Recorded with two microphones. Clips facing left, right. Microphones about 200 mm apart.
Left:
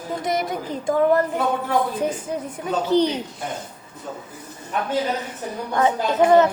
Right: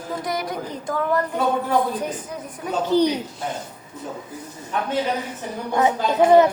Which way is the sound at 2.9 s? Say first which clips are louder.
Right 1 dB; 10° right (ahead or behind).